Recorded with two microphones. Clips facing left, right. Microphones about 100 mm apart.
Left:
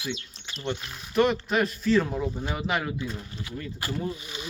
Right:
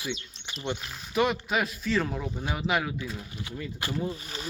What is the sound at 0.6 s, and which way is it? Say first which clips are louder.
Speech: left 1 dB; 5° right (ahead or behind).